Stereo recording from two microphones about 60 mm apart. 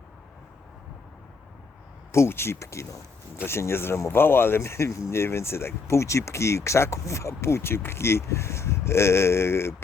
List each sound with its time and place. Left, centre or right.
2.1 s speech: left